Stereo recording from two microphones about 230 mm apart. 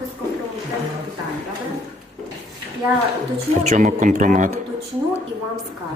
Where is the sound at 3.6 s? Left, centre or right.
Right.